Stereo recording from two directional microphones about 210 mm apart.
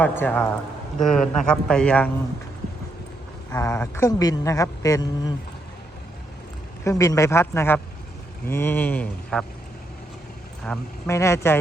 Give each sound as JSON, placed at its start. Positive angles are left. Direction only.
{"t": 0.0, "sound": "a man's voice", "side_deg": 5}
{"t": 3.5, "sound": "a man's voice", "side_deg": 10}
{"t": 6.8, "sound": "a man's voice", "side_deg": 15}
{"t": 10.6, "sound": "a man's voice", "side_deg": 5}